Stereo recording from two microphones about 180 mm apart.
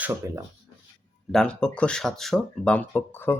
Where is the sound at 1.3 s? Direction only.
5° left (ahead or behind).